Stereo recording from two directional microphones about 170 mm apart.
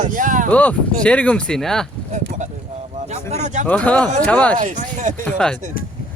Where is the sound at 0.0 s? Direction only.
50° right (ahead or behind).